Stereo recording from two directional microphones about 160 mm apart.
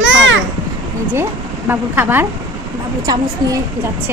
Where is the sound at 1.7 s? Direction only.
15° right (ahead or behind).